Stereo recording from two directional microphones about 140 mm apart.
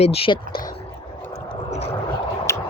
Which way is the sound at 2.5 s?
20° left (ahead or behind).